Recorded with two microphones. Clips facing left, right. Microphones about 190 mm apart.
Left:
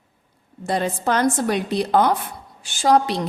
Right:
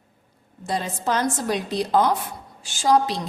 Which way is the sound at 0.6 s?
60° left (ahead or behind).